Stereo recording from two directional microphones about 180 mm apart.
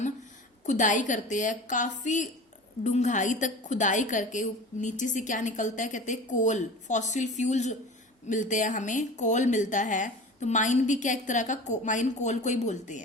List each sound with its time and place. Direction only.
0.6 s a woman's voice: 45° left (ahead or behind)